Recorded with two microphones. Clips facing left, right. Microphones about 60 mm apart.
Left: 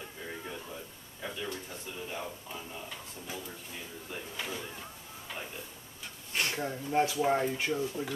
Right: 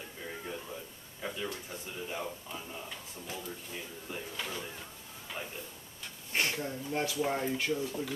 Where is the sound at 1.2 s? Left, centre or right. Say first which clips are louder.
Even; centre.